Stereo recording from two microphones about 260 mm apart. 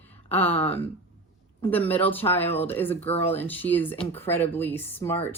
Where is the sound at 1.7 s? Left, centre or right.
Centre.